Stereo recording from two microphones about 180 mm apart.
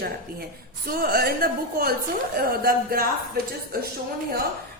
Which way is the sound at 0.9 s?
55° right (ahead or behind).